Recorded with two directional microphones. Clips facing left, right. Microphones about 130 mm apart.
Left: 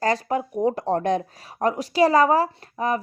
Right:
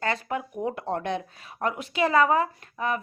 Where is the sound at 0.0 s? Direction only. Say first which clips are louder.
Left 6 dB; 35° left (ahead or behind).